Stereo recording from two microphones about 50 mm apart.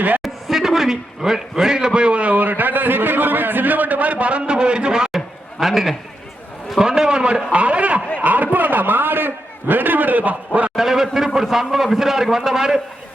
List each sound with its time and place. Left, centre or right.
0.2 s a man's voice: centre
5.1 s a sound: centre
6.7 s a man's voice: centre; by 10.7 s right
10.8 s a man's voice: centre